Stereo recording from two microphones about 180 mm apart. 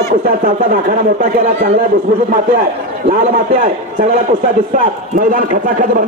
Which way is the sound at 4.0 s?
40° right (ahead or behind).